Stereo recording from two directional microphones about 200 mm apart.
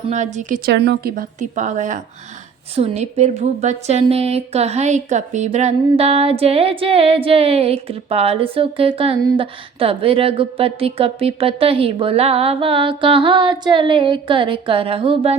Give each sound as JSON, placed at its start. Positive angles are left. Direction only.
{"t": 0.1, "sound": "a woman's voice", "side_deg": -35}
{"t": 0.7, "sound": "a woman's voice", "side_deg": -55}